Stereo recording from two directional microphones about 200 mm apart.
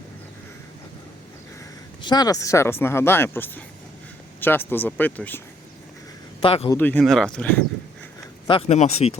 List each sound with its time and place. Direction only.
2.0 s speech: 20° left (ahead or behind)
4.4 s a sound: 10° left (ahead or behind)
4.7 s speech: 10° left (ahead or behind)
6.4 s a man's voice: 30° left (ahead or behind)
6.7 s speech: 10° left (ahead or behind)
8.4 s speech: 30° left (ahead or behind)